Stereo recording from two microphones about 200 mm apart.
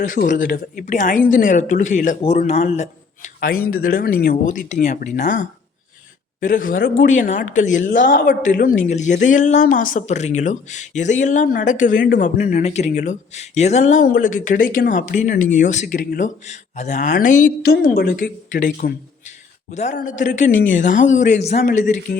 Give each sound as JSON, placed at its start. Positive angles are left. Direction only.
{"t": 0.0, "sound": "speech", "side_deg": 40}
{"t": 3.7, "sound": "speech", "side_deg": 45}